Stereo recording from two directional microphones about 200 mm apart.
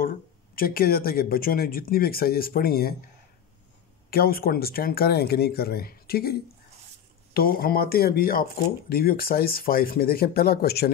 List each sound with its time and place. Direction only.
0.0 s speech: 45° left (ahead or behind)
4.1 s speech: 50° left (ahead or behind)